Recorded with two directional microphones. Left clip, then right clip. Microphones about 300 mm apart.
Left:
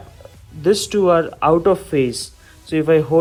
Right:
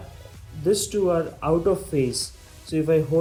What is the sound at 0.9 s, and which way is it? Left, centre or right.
Speech, left.